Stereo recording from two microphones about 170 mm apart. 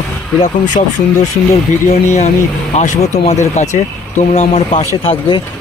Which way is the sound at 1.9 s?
40° left (ahead or behind).